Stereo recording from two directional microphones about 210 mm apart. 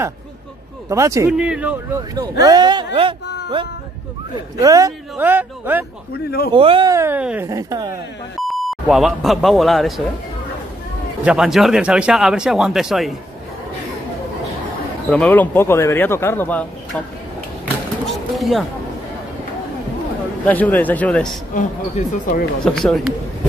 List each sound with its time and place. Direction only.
0.8 s speech: 15° right (ahead or behind)
4.6 s speech: 15° right (ahead or behind)
6.5 s speech: 25° right (ahead or behind)
8.4 s speech: centre (ahead or behind)
11.2 s speech: centre (ahead or behind)
15.0 s speech: 5° left (ahead or behind)
18.0 s speech: centre (ahead or behind)
20.4 s speech: 10° left (ahead or behind)
21.5 s speech: 40° left (ahead or behind)
22.7 s speech: 5° left (ahead or behind)